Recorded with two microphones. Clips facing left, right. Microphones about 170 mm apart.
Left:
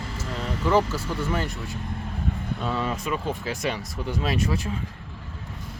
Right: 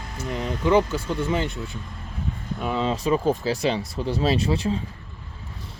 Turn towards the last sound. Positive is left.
turn(degrees=-30)  # may be behind; listen again after turning